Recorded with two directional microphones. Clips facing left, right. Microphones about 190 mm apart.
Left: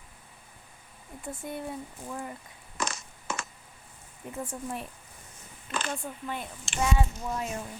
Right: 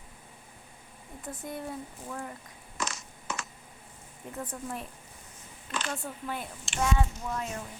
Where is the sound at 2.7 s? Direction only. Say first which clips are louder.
Left 2 dB; 55° left (ahead or behind).